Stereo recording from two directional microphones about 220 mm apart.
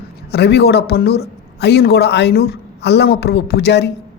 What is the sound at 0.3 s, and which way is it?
A woman's voice, 50° left (ahead or behind).